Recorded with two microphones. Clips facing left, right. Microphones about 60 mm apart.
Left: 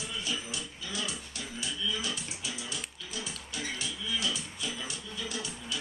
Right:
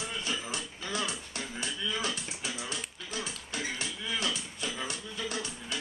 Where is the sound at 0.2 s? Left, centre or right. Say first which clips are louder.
Right 1 dB; right.